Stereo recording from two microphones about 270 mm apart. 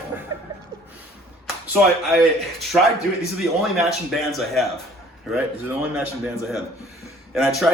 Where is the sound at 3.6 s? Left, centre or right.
Centre.